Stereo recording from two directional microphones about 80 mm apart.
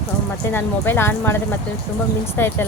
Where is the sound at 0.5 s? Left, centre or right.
Left.